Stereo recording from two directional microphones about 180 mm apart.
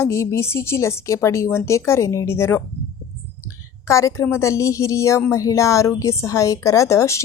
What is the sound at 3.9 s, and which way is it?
A woman's voice, 15° left (ahead or behind).